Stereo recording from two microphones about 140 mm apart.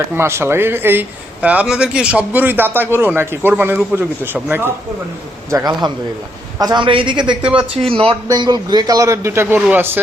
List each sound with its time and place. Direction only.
0.2 s speech: 20° right (ahead or behind)
5.5 s a man's voice: 25° right (ahead or behind)
8.3 s a man's voice: 30° right (ahead or behind)